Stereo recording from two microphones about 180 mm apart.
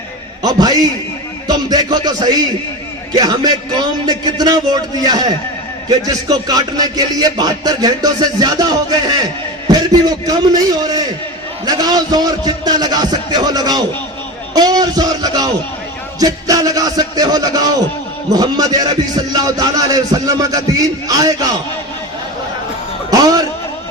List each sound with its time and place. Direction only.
0.4 s a man's voice: 20° right (ahead or behind)
23.1 s music: 20° right (ahead or behind)